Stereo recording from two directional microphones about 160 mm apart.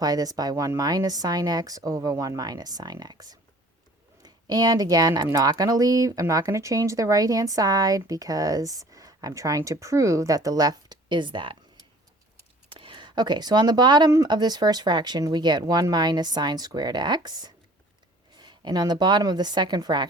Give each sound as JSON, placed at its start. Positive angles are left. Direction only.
{"t": 0.0, "sound": "speech", "side_deg": -25}